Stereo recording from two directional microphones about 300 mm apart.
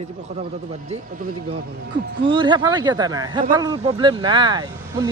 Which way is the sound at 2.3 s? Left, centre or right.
Centre.